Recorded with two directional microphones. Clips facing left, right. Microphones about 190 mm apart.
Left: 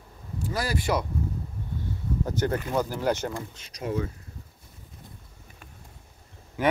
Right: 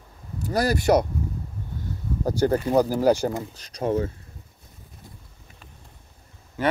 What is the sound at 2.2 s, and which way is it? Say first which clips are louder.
Speech: right 7 dB; 35° right (ahead or behind).